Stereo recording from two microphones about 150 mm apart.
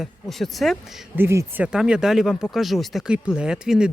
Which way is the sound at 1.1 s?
15° right (ahead or behind).